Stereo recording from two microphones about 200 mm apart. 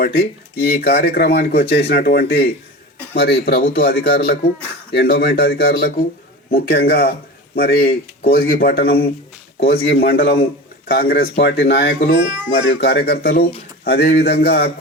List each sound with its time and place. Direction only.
0.0 s a man's voice: 50° left (ahead or behind)